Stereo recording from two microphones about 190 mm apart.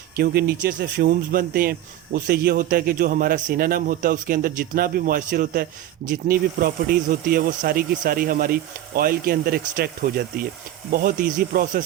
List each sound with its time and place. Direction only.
0.2 s speech: 55° right (ahead or behind)